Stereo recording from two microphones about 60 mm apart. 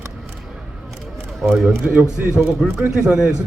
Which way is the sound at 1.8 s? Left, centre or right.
Right.